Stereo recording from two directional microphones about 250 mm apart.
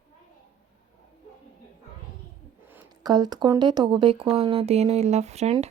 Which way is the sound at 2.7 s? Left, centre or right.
Centre.